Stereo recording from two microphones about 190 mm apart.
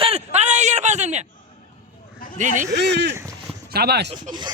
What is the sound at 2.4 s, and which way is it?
Speech, 40° right (ahead or behind).